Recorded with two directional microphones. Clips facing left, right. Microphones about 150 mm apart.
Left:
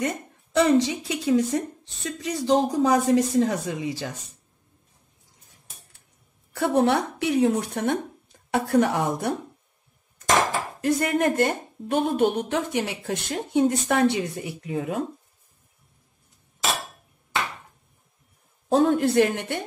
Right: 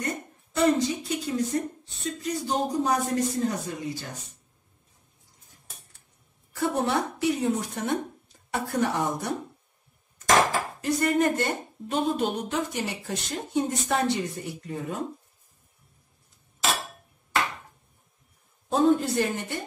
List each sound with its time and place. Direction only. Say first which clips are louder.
0.6 s speech: left 3 dB; 90° left
6.5 s a woman's voice: left 5 dB; 65° left (ahead or behind)
10.8 s a woman's voice: left 2 dB; 55° left (ahead or behind)
18.7 s a woman's voice: left 2 dB; 60° left (ahead or behind)